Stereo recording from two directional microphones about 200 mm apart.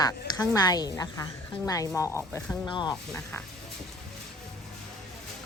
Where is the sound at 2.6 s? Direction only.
20° left (ahead or behind).